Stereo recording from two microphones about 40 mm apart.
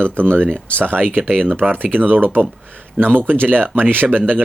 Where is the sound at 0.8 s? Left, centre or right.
Right.